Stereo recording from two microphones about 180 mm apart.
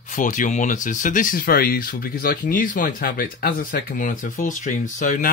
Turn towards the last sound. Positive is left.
turn(degrees=45)  # may be behind; listen again after turning